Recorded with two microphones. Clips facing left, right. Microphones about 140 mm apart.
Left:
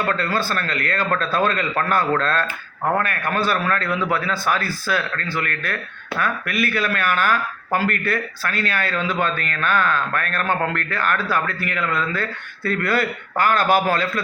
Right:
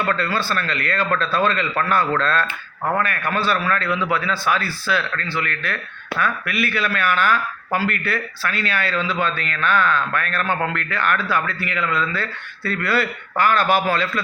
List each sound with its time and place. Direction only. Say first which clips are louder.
0.1 s speech: even; 45° left (ahead or behind)